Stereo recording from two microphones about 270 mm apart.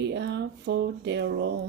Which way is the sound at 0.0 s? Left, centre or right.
Right.